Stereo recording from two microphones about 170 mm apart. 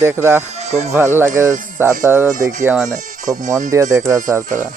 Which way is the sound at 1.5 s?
50° right (ahead or behind).